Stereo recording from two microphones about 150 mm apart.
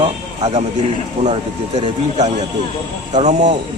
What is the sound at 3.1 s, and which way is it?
Speech, 50° right (ahead or behind).